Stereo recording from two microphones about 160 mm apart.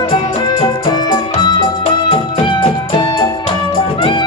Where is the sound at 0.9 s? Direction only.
25° left (ahead or behind).